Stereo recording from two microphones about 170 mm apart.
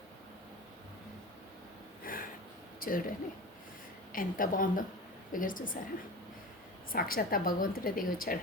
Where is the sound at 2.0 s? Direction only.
55° left (ahead or behind).